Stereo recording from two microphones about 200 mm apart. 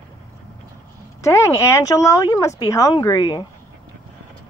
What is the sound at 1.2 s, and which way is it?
Speech, 15° left (ahead or behind).